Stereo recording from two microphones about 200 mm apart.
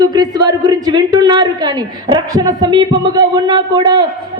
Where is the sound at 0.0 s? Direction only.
20° right (ahead or behind).